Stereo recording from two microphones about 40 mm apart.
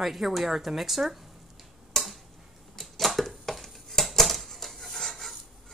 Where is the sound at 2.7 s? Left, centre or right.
Centre.